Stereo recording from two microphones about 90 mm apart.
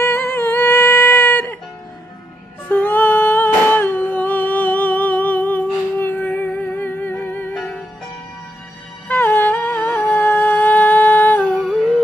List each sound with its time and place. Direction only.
0.0 s music: 25° left (ahead or behind)
2.7 s humming: 20° left (ahead or behind)
9.0 s music: 25° left (ahead or behind)